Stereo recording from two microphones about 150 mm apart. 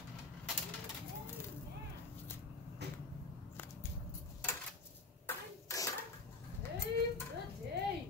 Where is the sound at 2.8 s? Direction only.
90° right.